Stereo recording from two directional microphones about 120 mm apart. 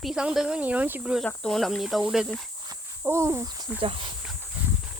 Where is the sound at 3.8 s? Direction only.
45° right (ahead or behind).